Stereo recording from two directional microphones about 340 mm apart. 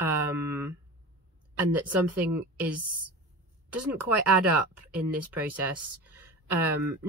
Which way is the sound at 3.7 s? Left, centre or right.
Centre.